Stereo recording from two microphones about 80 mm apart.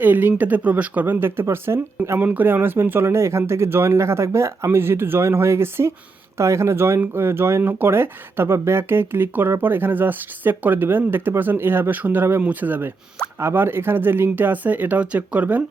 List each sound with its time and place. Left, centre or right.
0.0 s speech: right
2.1 s speech: right